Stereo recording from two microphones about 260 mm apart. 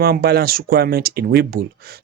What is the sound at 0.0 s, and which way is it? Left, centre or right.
Speech, right.